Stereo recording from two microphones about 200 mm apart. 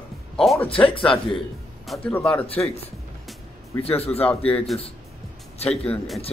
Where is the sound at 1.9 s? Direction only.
5° left (ahead or behind).